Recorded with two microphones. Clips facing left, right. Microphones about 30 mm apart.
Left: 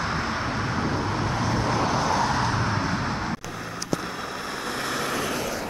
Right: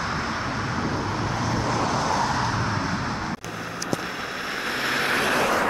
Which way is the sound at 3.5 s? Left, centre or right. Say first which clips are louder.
Right 1 dB; centre.